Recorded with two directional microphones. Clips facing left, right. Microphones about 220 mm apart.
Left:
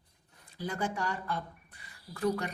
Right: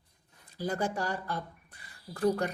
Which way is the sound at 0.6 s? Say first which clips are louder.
Right 3 dB; 40° right (ahead or behind).